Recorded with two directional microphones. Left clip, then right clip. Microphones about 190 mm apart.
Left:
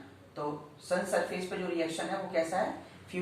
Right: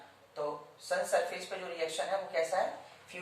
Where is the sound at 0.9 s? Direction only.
Centre (ahead or behind).